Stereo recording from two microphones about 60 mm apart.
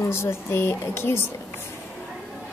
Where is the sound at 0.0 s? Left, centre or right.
Left.